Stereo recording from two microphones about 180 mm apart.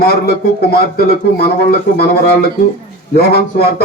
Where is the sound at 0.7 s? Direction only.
60° left (ahead or behind).